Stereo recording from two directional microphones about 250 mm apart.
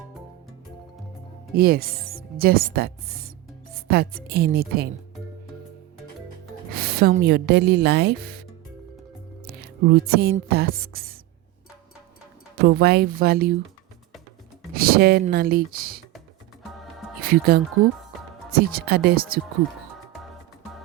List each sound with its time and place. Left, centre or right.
1.5 s speech: right
6.7 s speech: right
12.6 s speech: right
14.7 s speech: right
17.2 s speech: right